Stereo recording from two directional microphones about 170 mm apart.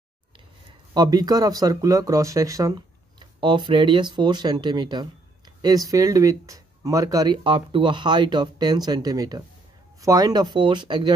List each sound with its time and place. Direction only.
0.9 s speech: 25° right (ahead or behind)